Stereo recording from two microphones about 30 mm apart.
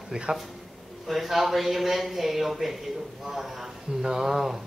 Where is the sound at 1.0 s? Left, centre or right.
Centre.